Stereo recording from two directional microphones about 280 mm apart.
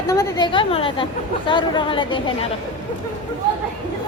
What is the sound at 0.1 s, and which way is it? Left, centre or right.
A woman's voice, centre.